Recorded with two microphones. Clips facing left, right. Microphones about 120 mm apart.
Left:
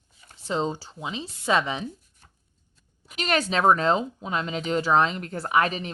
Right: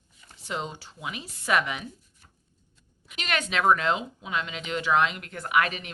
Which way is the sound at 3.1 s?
40° left (ahead or behind).